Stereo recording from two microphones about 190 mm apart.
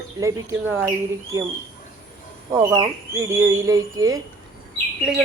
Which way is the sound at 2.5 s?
20° right (ahead or behind).